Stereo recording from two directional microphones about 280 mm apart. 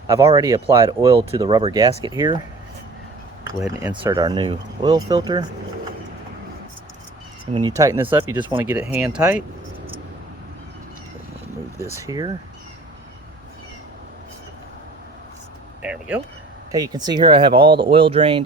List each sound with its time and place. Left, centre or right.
0.1 s speech: centre
3.6 s speech: centre
3.9 s speech: centre
7.5 s speech: centre
11.8 s speech: centre
15.8 s speech: centre